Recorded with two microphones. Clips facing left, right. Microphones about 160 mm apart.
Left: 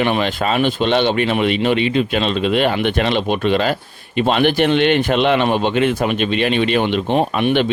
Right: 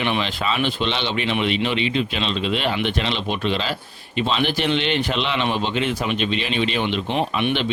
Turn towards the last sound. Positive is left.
turn(degrees=50)  # may be behind; listen again after turning